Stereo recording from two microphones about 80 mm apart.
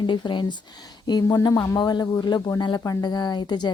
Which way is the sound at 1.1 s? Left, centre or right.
Left.